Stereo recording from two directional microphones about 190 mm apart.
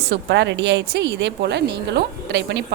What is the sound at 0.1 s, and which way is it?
A woman's voice, 65° right (ahead or behind).